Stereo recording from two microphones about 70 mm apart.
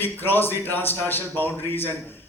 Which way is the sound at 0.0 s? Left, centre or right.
Left.